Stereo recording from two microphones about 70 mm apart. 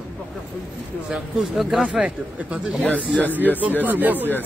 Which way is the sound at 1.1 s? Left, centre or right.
Centre.